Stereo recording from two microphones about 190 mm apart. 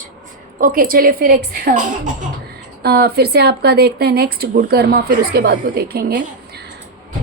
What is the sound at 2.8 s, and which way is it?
A woman's voice, 55° right (ahead or behind).